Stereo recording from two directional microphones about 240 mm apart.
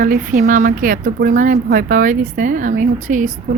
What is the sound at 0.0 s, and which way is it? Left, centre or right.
A woman's voice, right.